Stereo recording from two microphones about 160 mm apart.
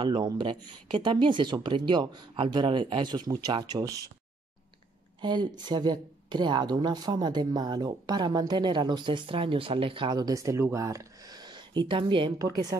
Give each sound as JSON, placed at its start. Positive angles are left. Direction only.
{"t": 0.0, "sound": "speech", "side_deg": -30}
{"t": 5.2, "sound": "speech", "side_deg": -30}